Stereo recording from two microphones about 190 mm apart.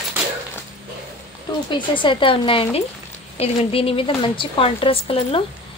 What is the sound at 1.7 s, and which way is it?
A woman's voice, 25° left (ahead or behind).